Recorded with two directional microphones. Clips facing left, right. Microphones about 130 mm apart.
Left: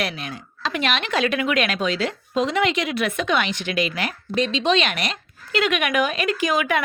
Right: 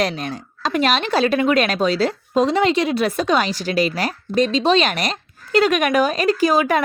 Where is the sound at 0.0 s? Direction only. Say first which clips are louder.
Right 6 dB; 40° right (ahead or behind).